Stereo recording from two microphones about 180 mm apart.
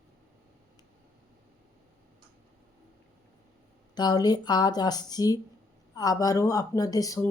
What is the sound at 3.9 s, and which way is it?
A woman's voice, 20° left (ahead or behind).